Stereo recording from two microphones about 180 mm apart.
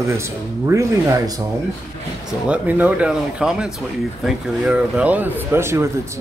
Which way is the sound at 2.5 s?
10° right (ahead or behind).